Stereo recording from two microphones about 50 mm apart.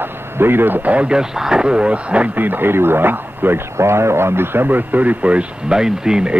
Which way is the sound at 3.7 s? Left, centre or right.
Right.